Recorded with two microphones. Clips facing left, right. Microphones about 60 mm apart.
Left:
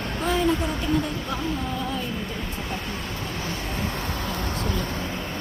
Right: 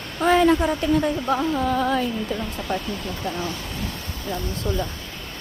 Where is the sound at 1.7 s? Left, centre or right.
Right.